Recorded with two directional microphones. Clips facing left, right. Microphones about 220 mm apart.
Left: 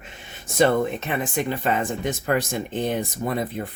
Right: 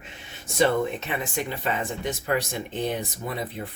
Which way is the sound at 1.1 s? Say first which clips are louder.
Left 4 dB; 50° left (ahead or behind).